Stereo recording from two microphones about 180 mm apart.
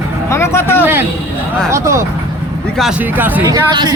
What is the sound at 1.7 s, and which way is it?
Speech, 15° right (ahead or behind).